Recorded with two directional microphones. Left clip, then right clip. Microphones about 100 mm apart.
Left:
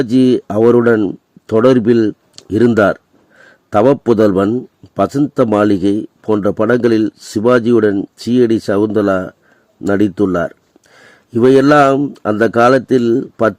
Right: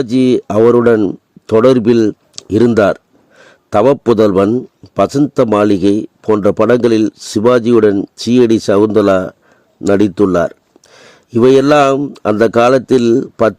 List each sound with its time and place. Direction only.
0.0 s a man's voice: 35° right (ahead or behind)